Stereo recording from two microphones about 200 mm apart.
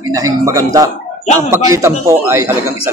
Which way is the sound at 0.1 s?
15° right (ahead or behind).